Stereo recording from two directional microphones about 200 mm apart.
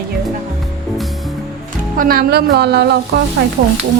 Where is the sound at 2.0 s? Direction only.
50° right (ahead or behind).